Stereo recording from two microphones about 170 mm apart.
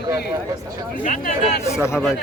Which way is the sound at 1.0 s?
50° left (ahead or behind).